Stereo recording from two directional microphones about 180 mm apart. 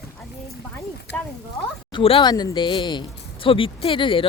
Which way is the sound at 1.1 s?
5° left (ahead or behind).